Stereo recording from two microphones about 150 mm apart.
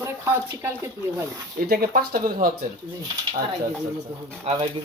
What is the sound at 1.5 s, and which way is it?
Speech, 85° right.